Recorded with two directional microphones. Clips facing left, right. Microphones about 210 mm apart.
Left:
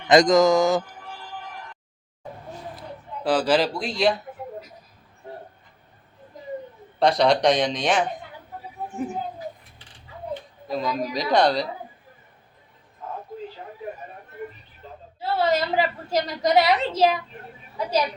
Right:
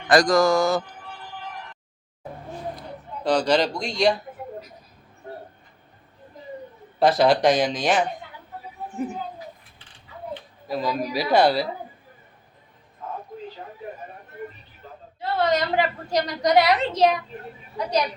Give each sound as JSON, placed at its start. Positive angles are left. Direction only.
{"t": 0.1, "sound": "music", "side_deg": 20}
{"t": 3.2, "sound": "a woman's voice", "side_deg": 5}
{"t": 7.0, "sound": "a woman's voice", "side_deg": -5}
{"t": 10.7, "sound": "a woman's voice", "side_deg": -5}
{"t": 15.2, "sound": "a woman's voice", "side_deg": 5}